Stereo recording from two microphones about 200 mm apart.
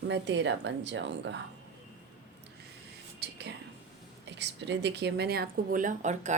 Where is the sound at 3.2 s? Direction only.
55° right (ahead or behind).